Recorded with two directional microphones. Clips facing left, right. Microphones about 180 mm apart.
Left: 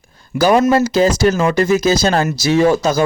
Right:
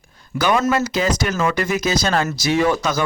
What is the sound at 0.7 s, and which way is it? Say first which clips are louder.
Speech: left 6 dB; 35° left (ahead or behind).